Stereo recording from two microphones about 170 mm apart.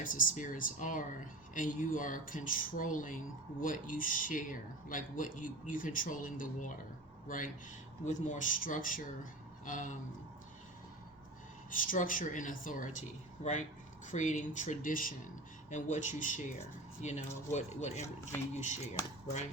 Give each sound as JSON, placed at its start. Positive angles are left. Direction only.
{"t": 0.0, "sound": "speech", "side_deg": 55}
{"t": 11.7, "sound": "speech", "side_deg": 55}
{"t": 19.0, "sound": "speech", "side_deg": 15}